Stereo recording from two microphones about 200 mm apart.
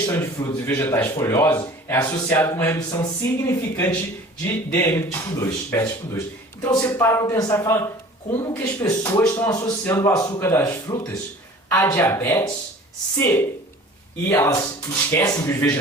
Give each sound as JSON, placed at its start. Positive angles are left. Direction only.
{"t": 0.0, "sound": "speech", "side_deg": 15}